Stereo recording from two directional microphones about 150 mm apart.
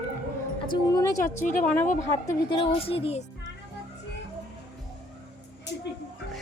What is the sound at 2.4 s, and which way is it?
Speech, 35° left (ahead or behind).